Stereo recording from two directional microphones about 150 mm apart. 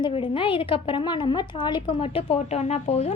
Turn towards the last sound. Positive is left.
turn(degrees=45)  # may be behind; listen again after turning